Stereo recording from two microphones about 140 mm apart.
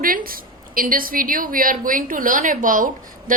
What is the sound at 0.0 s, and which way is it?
A woman's voice, 90° right.